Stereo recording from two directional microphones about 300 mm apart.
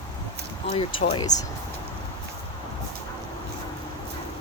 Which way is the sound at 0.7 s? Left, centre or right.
Centre.